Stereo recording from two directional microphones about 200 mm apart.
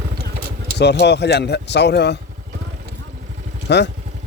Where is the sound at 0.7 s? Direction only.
55° left (ahead or behind).